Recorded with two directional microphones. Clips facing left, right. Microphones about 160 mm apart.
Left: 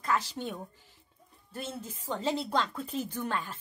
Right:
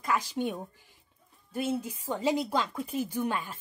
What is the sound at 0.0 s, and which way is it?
A woman's voice, 10° right (ahead or behind).